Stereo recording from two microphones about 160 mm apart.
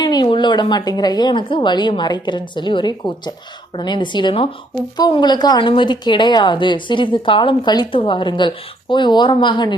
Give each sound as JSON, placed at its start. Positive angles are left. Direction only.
{"t": 0.0, "sound": "a woman's voice", "side_deg": 25}